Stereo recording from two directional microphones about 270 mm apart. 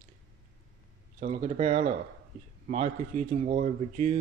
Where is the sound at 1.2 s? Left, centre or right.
Right.